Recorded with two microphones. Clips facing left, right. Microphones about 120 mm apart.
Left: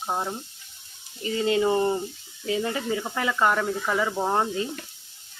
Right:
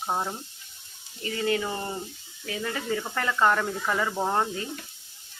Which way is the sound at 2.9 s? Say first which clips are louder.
Left 1 dB; 10° left (ahead or behind).